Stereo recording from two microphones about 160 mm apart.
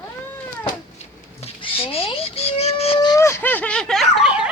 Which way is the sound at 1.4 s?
35° left (ahead or behind).